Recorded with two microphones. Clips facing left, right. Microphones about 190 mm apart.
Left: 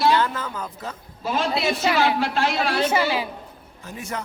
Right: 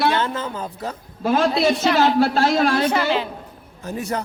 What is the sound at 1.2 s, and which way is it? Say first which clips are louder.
Speech: right 6 dB; 55° right (ahead or behind).